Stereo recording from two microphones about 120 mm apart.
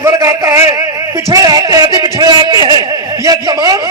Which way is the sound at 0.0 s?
30° right (ahead or behind).